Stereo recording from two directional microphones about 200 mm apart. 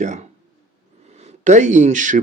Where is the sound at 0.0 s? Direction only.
35° right (ahead or behind).